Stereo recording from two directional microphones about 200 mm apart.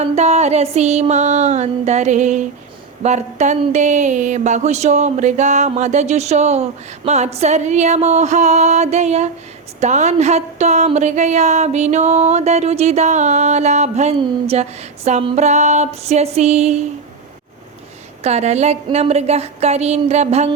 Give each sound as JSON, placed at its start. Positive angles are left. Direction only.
{"t": 0.0, "sound": "speech", "side_deg": -35}
{"t": 18.2, "sound": "speech", "side_deg": -35}